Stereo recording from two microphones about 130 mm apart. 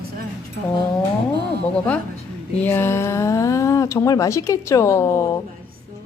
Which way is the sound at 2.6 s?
20° left (ahead or behind).